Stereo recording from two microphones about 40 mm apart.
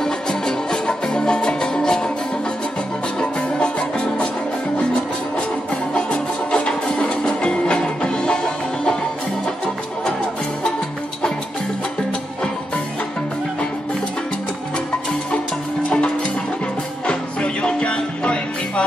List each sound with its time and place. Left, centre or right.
0.0 s music: centre
3.2 s music: left
5.9 s music: left
17.0 s music: left